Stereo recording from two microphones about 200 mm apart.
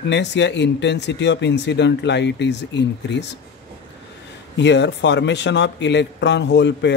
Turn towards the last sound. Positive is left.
turn(degrees=60)  # may be behind; listen again after turning